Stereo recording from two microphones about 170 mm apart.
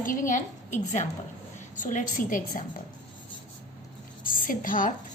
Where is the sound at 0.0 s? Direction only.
50° left (ahead or behind).